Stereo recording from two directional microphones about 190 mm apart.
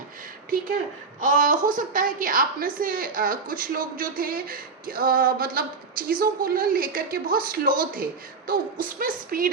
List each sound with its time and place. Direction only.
1.2 s a woman's voice: 45° right (ahead or behind)